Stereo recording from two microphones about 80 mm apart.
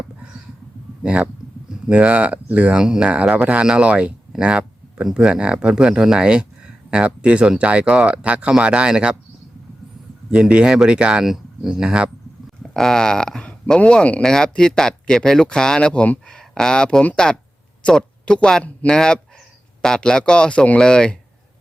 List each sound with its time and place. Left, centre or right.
1.0 s speech: centre
10.3 s speech: centre
12.7 s speech: centre